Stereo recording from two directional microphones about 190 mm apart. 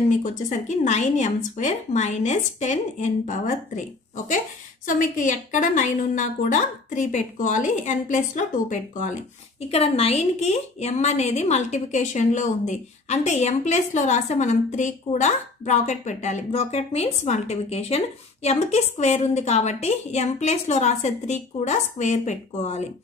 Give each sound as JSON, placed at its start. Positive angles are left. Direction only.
{"t": 0.1, "sound": "a woman's voice", "side_deg": 40}
{"t": 4.8, "sound": "a woman's voice", "side_deg": 45}